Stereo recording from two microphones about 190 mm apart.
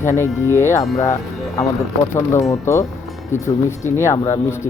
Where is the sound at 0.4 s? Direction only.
15° left (ahead or behind).